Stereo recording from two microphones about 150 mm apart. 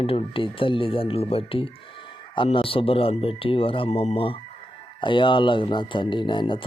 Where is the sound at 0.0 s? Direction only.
40° left (ahead or behind).